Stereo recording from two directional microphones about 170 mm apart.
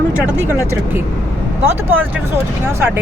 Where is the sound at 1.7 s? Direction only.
10° right (ahead or behind).